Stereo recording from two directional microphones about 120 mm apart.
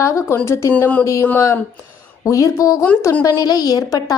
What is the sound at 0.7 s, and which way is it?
Speech, 10° left (ahead or behind).